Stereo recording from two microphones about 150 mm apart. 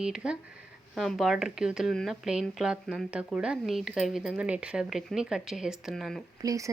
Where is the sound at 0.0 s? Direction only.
5° right (ahead or behind).